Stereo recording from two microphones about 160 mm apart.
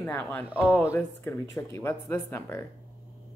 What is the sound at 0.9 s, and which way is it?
Speech, 15° left (ahead or behind).